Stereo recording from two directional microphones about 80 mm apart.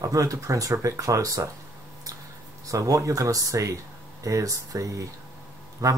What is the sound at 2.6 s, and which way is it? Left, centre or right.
Speech, right.